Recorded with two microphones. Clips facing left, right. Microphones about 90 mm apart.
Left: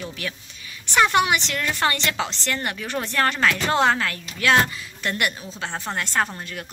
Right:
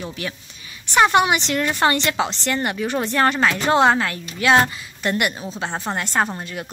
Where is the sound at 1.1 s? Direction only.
20° right (ahead or behind).